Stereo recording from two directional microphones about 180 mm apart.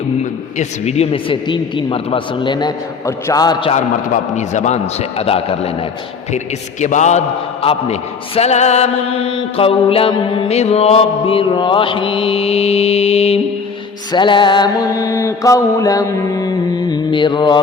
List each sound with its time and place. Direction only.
0.6 s mantra: 35° left (ahead or behind)
3.8 s mantra: 40° left (ahead or behind); by 17.6 s 25° left (ahead or behind)